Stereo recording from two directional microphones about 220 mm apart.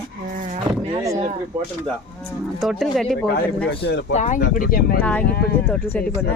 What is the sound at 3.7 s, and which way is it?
Speech, 50° left (ahead or behind).